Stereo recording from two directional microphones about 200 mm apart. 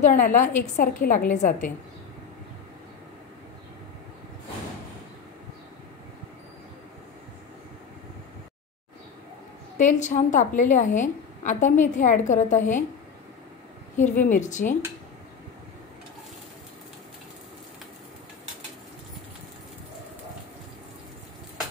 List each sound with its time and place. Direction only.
0.0 s a woman's voice: 40° left (ahead or behind)
9.8 s a woman's voice: 40° left (ahead or behind)
13.9 s a woman's voice: 40° left (ahead or behind)